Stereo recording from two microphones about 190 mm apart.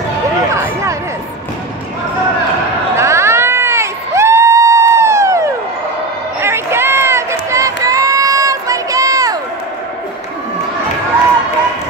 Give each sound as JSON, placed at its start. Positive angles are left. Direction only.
{"t": 3.0, "sound": "crowd", "side_deg": -15}
{"t": 6.4, "sound": "run", "side_deg": -15}